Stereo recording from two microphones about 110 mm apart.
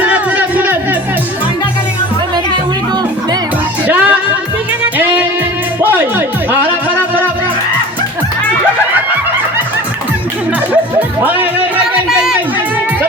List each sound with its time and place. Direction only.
0.0 s music: 15° right (ahead or behind)
3.8 s music: 15° right (ahead or behind)
5.8 s music: 15° right (ahead or behind)
11.2 s music: 15° right (ahead or behind)